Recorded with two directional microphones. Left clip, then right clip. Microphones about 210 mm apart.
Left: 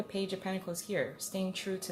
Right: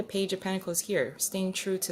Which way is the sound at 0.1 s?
50° right (ahead or behind).